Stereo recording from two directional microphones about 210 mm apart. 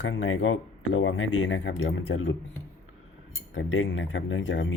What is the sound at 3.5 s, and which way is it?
Speech, 60° left (ahead or behind).